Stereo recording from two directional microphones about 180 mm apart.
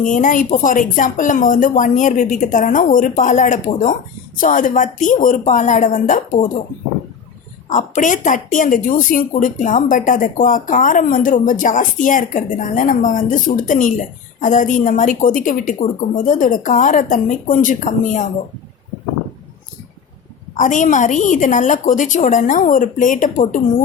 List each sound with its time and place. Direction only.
0.0 s a woman's voice: 45° left (ahead or behind)
7.7 s a woman's voice: 45° left (ahead or behind)
20.6 s a woman's voice: 45° left (ahead or behind)